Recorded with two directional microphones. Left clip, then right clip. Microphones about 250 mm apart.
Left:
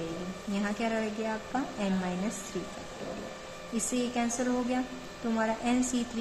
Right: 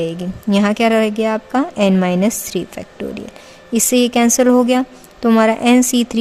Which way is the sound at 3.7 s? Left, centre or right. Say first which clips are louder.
Right 18 dB; right.